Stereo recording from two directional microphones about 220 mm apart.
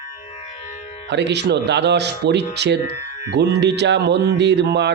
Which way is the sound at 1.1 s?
50° right (ahead or behind).